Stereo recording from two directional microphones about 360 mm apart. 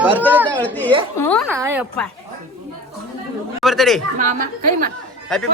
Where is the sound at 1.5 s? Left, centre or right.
Centre.